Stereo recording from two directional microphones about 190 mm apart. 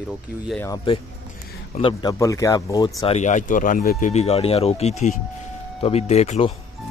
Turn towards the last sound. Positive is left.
turn(degrees=35)  # may be behind; listen again after turning